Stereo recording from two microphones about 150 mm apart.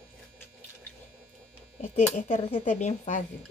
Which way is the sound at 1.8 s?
45° left (ahead or behind).